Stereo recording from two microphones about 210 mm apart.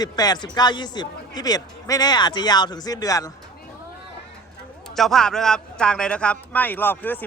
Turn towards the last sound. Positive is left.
turn(degrees=10)  # may be behind; listen again after turning